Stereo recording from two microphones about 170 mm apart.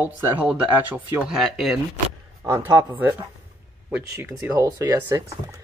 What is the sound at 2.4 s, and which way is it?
Speech, 15° right (ahead or behind).